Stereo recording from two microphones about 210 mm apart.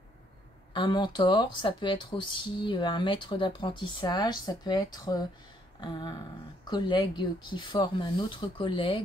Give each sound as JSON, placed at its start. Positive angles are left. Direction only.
{"t": 0.7, "sound": "speech", "side_deg": 25}